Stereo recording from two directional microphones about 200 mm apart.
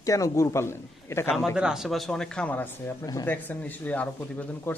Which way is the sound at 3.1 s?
20° left (ahead or behind).